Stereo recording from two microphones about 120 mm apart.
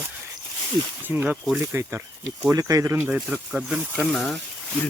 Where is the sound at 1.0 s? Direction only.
15° right (ahead or behind).